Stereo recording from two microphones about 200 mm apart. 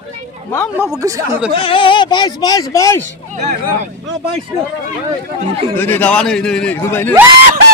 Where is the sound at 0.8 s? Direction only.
15° right (ahead or behind).